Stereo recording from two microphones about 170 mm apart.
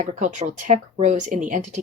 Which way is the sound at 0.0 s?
45° right (ahead or behind).